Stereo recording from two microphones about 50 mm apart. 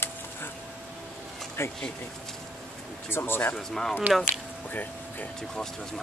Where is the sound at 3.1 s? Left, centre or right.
Left.